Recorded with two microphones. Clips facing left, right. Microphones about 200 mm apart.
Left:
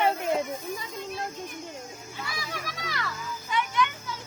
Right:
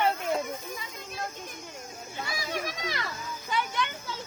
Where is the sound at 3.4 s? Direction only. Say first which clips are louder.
Left 3 dB; 35° right (ahead or behind).